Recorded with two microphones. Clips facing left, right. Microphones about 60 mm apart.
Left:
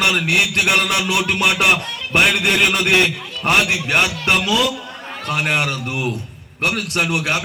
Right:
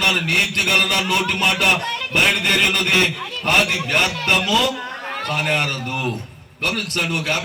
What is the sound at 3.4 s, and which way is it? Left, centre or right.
A man's voice, right.